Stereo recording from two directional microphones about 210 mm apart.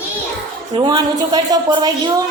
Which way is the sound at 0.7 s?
20° right (ahead or behind).